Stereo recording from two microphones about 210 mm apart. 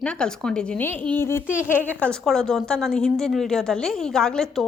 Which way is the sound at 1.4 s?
5° right (ahead or behind).